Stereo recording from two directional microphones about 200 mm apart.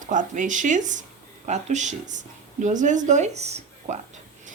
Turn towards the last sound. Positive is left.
turn(degrees=-35)  # may be behind; listen again after turning